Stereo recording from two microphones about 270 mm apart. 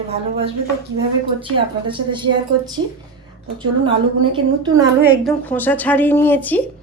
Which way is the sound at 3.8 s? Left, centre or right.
Centre.